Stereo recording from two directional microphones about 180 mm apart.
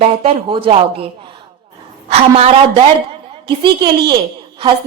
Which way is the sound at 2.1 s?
35° right (ahead or behind).